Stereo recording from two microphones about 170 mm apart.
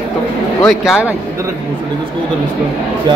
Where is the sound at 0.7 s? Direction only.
5° right (ahead or behind).